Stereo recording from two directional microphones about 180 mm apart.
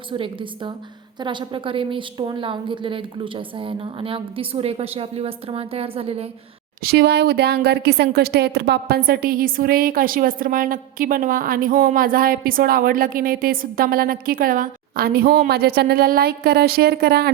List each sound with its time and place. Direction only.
0.1 s a woman's voice: 30° right (ahead or behind)
6.8 s a woman's voice: 65° right (ahead or behind)